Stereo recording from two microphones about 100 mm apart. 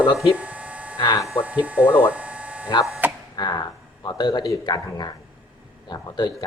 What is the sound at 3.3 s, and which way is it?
A man's voice, 40° left (ahead or behind).